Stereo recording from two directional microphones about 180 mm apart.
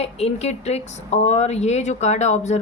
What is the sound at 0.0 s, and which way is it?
Speech, 35° left (ahead or behind).